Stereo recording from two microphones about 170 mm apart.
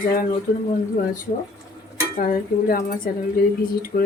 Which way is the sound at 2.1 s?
55° left (ahead or behind).